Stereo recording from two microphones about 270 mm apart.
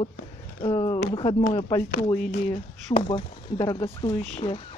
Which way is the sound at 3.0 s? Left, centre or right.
Centre.